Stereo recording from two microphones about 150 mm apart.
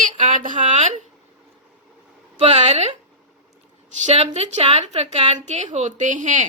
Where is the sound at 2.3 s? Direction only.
45° right (ahead or behind).